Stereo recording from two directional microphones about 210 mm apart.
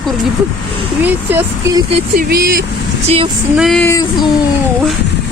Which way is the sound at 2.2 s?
45° right (ahead or behind).